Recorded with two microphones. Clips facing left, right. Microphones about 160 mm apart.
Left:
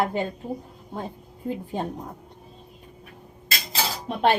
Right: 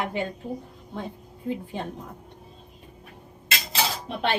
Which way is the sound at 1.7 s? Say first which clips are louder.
Left 4 dB; 40° left (ahead or behind).